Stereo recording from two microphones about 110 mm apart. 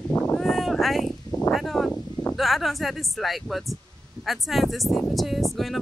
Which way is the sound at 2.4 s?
Centre (ahead or behind).